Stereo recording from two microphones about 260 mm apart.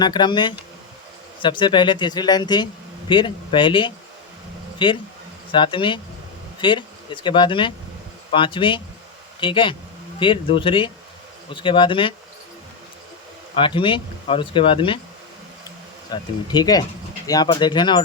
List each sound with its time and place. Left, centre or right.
0.0 s speech: centre
13.6 s speech: centre
16.0 s speech: centre